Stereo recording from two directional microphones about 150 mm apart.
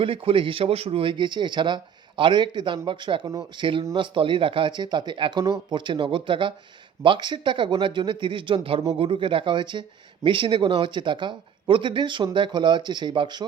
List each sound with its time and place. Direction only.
0.0 s speech: 35° right (ahead or behind)
3.2 s speech: 20° right (ahead or behind)
3.9 s speech: 35° right (ahead or behind)